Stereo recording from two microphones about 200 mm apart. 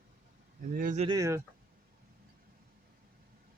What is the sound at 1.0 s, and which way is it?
Speech, 20° right (ahead or behind).